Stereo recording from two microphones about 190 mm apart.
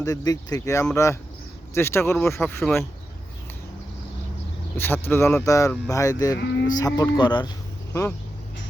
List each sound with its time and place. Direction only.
0.0 s speech: 20° left (ahead or behind)
4.8 s speech: 10° left (ahead or behind)
6.4 s speech: 65° left (ahead or behind)
6.7 s speech: 20° left (ahead or behind)